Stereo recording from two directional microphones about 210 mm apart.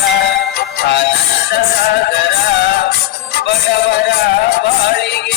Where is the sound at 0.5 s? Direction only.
50° left (ahead or behind).